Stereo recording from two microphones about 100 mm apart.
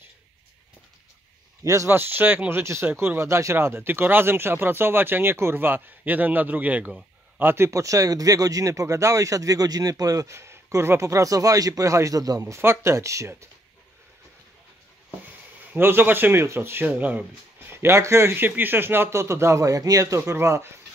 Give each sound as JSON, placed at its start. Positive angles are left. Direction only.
{"t": 1.6, "sound": "speech", "side_deg": -30}
{"t": 15.7, "sound": "speech", "side_deg": -20}
{"t": 17.7, "sound": "speech", "side_deg": -25}